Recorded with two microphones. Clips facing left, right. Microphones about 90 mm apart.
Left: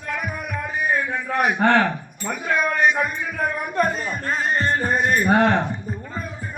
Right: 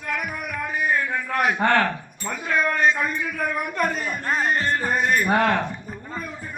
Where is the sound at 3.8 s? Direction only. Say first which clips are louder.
Left 4 dB; 35° left (ahead or behind).